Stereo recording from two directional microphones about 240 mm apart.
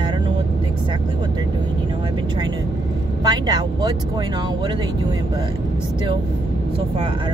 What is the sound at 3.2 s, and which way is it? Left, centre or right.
Speech, centre.